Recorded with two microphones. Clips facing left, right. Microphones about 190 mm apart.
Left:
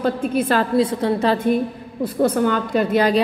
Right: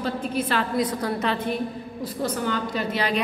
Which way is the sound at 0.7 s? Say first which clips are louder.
Left 7 dB; 25° left (ahead or behind).